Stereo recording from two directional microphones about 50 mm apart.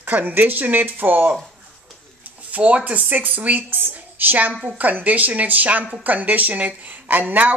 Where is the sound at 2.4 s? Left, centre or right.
Right.